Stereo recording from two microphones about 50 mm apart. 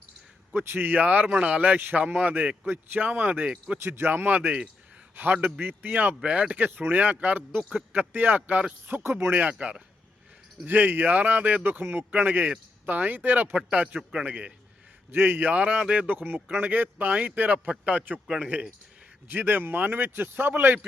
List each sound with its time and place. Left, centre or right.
0.5 s speech: right
0.8 s speech: right
3.4 s a man's voice: right
3.8 s a man's voice: right
4.3 s speech: right
6.2 s a man's voice: right
6.6 s speech: right
7.6 s speech: centre
7.9 s a man's voice: right
10.7 s speech: right
13.7 s a man's voice: right
15.1 s a man's voice: right
19.3 s a man's voice: right